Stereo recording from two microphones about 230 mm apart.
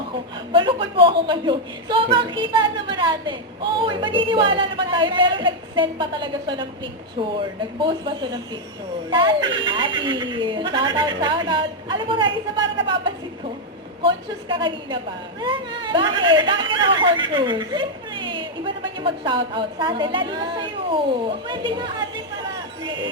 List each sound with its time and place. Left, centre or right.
0.5 s speech: right